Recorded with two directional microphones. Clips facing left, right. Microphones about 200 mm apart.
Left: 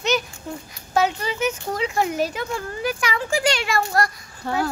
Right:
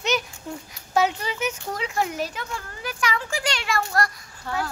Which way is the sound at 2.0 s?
5° left (ahead or behind).